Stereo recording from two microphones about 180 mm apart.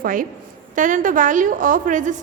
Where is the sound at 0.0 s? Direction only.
50° right (ahead or behind).